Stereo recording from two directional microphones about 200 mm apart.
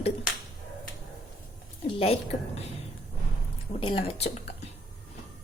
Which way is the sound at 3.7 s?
25° left (ahead or behind).